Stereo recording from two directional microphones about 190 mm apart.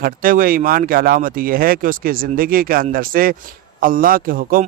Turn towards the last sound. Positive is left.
turn(degrees=-50)  # may be behind; listen again after turning